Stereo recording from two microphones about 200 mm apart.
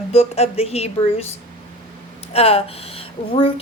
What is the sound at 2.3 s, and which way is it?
Speech, 30° left (ahead or behind).